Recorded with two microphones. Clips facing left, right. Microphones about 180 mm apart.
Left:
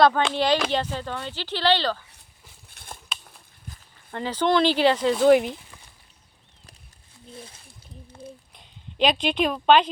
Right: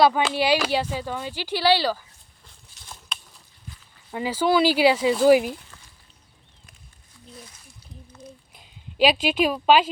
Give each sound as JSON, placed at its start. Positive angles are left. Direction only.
{"t": 0.0, "sound": "speech", "side_deg": -5}
{"t": 2.6, "sound": "a sound", "side_deg": 55}
{"t": 4.1, "sound": "speech", "side_deg": -10}
{"t": 7.3, "sound": "speech", "side_deg": 30}
{"t": 8.5, "sound": "speech", "side_deg": -5}